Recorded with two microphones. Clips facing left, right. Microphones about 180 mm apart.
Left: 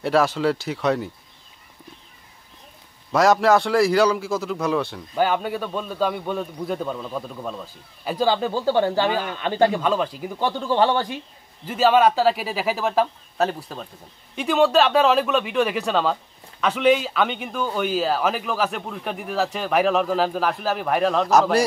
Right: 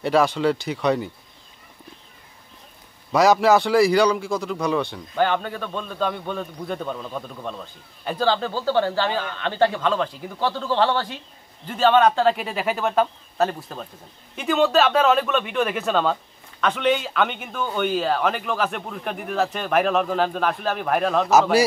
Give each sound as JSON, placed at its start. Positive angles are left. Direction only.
{"t": 0.0, "sound": "speech", "side_deg": 0}
{"t": 3.1, "sound": "a man's voice", "side_deg": 0}